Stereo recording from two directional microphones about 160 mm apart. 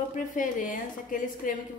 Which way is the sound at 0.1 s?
55° left (ahead or behind).